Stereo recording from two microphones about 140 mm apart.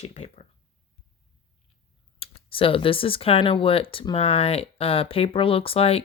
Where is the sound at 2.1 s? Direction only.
45° left (ahead or behind).